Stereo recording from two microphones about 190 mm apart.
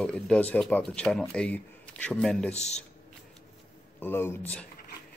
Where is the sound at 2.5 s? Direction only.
35° left (ahead or behind).